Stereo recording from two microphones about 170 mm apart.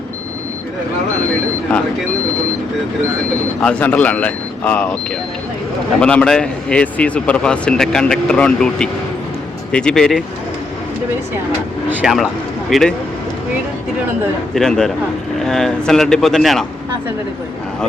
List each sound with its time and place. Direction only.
3.6 s speech: 5° left (ahead or behind)
6.0 s speech: 5° left (ahead or behind)
11.9 s speech: centre (ahead or behind)
14.5 s speech: 5° left (ahead or behind)